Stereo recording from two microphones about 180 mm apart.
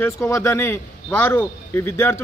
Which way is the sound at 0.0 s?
15° left (ahead or behind).